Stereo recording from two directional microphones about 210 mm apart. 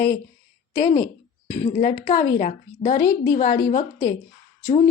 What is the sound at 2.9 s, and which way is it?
A woman's voice, 15° left (ahead or behind).